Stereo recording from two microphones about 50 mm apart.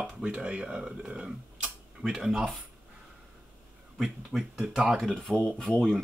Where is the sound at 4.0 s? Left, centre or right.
Centre.